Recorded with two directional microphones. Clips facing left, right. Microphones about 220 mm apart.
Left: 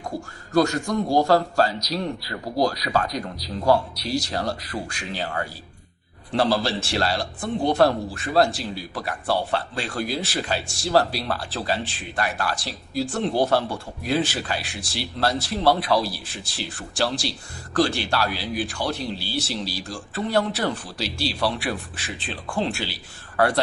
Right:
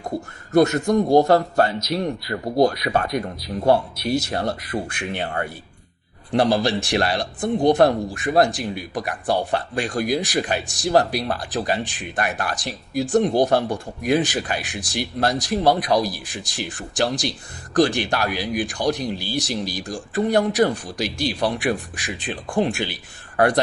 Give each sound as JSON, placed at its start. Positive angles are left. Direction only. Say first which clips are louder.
{"t": 0.1, "sound": "speech", "louder": "right 4 dB", "side_deg": -25}
{"t": 6.3, "sound": "speech", "louder": "right 3 dB", "side_deg": -15}